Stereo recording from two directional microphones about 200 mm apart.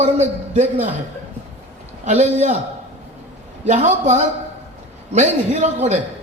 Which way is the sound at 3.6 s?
35° right (ahead or behind).